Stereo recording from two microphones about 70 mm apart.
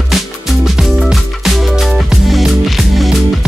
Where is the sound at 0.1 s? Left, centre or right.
Centre.